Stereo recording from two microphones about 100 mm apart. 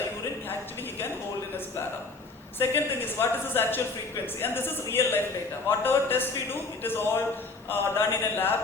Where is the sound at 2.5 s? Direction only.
20° left (ahead or behind).